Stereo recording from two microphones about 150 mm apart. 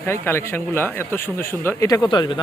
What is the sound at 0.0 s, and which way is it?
Speech, 15° left (ahead or behind).